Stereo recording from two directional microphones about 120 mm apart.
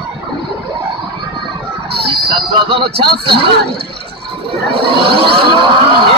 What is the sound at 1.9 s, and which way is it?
Speech, 50° right (ahead or behind).